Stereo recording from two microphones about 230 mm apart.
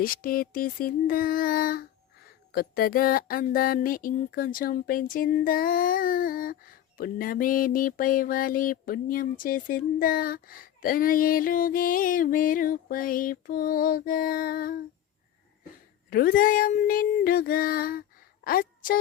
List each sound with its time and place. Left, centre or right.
0.0 s speech: left
16.0 s a woman's voice: left